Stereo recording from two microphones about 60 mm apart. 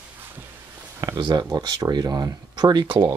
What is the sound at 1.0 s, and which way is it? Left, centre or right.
Speech, right.